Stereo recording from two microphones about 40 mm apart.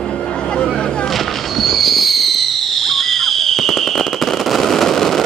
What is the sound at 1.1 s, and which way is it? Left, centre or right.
Fireworks, centre.